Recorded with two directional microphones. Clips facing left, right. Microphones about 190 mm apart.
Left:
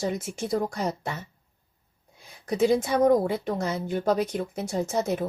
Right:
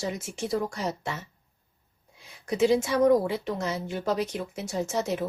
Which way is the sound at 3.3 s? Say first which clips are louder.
Left 2 dB; 55° left (ahead or behind).